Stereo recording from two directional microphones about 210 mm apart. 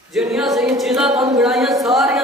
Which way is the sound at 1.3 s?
Centre (ahead or behind).